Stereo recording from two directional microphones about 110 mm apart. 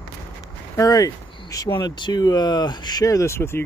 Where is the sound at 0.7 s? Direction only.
30° left (ahead or behind).